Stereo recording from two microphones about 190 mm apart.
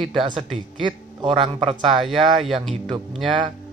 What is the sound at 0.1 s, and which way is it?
Speech, 30° right (ahead or behind).